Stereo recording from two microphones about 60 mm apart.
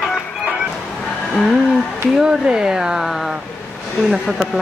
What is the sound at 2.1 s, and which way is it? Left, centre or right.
Speech, centre.